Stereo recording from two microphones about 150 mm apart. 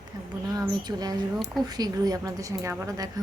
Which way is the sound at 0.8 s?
25° right (ahead or behind).